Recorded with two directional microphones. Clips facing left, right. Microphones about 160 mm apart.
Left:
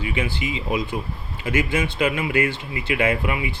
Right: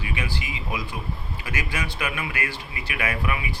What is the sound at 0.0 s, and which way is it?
Speech, 25° left (ahead or behind).